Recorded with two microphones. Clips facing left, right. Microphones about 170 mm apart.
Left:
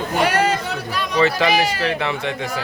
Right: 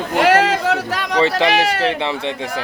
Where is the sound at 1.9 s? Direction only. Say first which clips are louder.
Right 2 dB; 25° right (ahead or behind).